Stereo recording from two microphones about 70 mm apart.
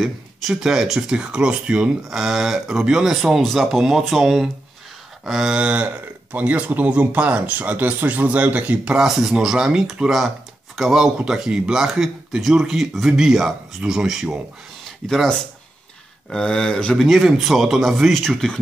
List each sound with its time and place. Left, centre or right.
0.0 s speech: centre
5.5 s speech: centre
8.9 s speech: centre
16.3 s speech: centre